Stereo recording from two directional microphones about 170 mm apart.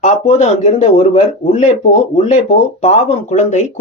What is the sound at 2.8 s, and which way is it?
Speech, 40° left (ahead or behind).